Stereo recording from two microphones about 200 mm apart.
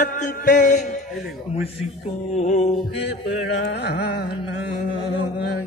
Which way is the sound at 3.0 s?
60° left (ahead or behind).